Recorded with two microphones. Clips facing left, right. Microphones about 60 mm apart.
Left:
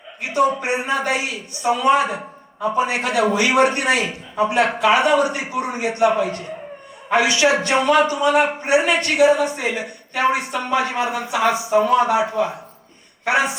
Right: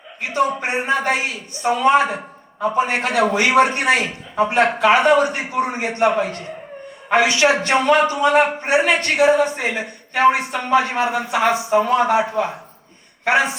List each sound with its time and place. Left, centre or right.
0.3 s a man's voice: right
13.2 s a man's voice: right